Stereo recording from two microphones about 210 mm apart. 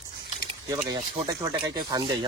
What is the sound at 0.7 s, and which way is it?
Speech, 15° right (ahead or behind).